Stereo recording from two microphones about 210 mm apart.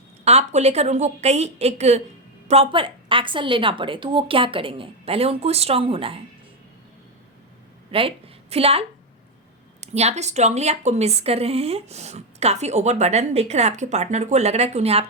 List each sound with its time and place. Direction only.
0.3 s a woman's voice: 30° right (ahead or behind)
7.9 s a woman's voice: 25° right (ahead or behind)
9.8 s a woman's voice: 30° right (ahead or behind)